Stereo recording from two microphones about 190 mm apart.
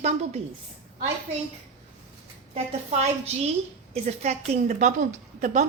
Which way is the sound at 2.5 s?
35° right (ahead or behind).